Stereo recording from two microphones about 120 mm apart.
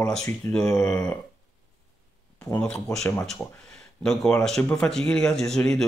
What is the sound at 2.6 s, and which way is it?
Speech, 5° left (ahead or behind).